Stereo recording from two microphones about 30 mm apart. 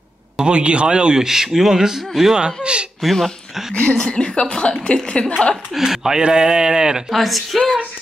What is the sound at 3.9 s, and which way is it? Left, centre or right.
A woman's voice, left.